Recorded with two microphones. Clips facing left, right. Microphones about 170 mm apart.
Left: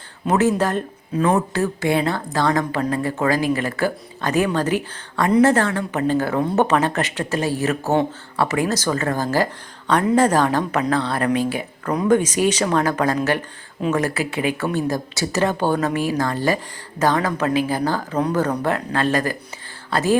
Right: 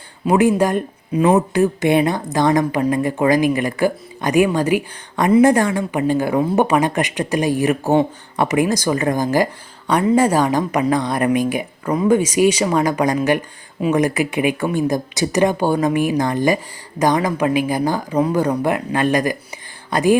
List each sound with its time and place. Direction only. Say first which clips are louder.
0.3 s speech: right 3 dB; 15° right (ahead or behind)